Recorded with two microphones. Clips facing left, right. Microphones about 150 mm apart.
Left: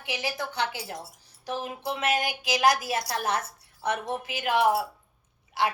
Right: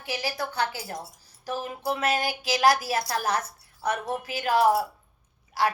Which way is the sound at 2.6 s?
35° right (ahead or behind).